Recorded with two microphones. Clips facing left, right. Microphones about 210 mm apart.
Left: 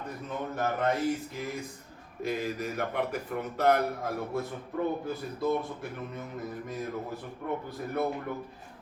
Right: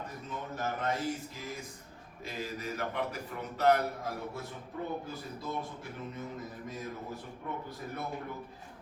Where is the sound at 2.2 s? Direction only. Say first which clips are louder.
Left 7 dB; 55° left (ahead or behind).